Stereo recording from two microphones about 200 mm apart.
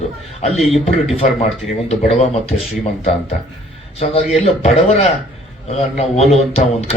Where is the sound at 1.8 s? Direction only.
30° left (ahead or behind).